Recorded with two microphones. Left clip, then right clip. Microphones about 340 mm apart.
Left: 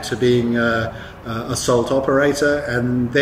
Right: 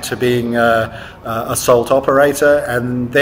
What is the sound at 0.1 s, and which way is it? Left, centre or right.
Speech, right.